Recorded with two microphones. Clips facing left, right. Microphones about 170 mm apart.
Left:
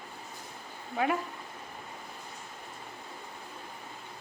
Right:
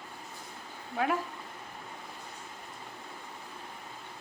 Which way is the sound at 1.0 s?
Centre (ahead or behind).